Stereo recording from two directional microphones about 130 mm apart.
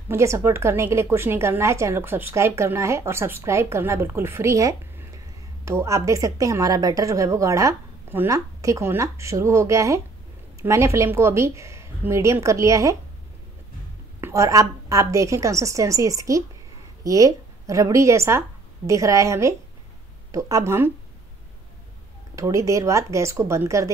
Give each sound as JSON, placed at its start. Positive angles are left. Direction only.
{"t": 0.1, "sound": "a woman's voice", "side_deg": -20}
{"t": 14.2, "sound": "a woman's voice", "side_deg": -25}
{"t": 22.3, "sound": "a woman's voice", "side_deg": -25}